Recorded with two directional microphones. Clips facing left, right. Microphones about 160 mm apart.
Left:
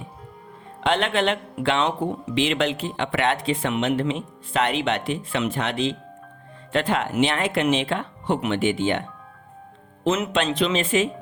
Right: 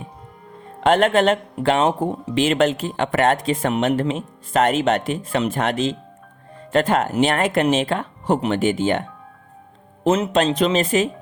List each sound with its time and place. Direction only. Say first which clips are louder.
0.8 s speech: right 6 dB; 45° right (ahead or behind)